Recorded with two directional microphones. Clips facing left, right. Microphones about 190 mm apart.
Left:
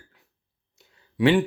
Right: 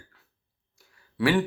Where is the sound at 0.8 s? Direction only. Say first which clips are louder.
Left 4 dB; 20° left (ahead or behind).